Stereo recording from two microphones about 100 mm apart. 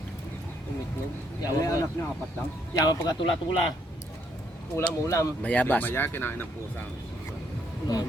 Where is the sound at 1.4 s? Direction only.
35° left (ahead or behind).